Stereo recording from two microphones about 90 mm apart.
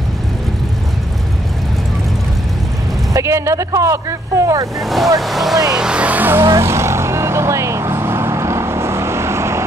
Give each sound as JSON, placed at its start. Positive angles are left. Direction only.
{"t": 3.1, "sound": "speech", "side_deg": -35}
{"t": 4.8, "sound": "speech", "side_deg": 0}
{"t": 5.7, "sound": "music", "side_deg": -10}
{"t": 6.6, "sound": "vehicle", "side_deg": -30}